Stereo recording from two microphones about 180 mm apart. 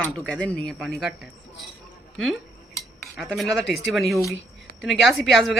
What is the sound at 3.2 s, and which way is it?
Speech, centre (ahead or behind).